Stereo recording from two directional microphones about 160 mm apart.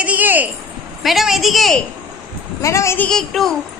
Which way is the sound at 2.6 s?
20° left (ahead or behind).